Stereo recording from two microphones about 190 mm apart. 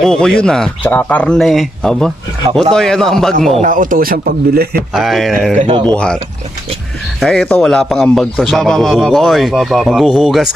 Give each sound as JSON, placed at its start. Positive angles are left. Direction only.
{"t": 0.0, "sound": "a man's voice", "side_deg": 5}
{"t": 3.5, "sound": "speech", "side_deg": -40}
{"t": 4.9, "sound": "a man's voice", "side_deg": 0}
{"t": 7.2, "sound": "a man's voice", "side_deg": 0}